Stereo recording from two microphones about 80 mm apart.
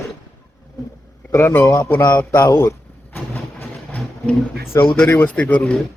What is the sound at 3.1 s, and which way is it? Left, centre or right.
Vehicle, left.